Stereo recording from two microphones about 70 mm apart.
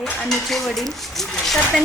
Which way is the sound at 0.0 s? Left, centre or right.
Centre.